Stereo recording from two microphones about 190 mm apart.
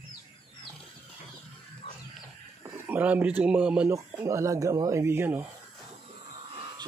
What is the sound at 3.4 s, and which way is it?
Speech, 5° right (ahead or behind).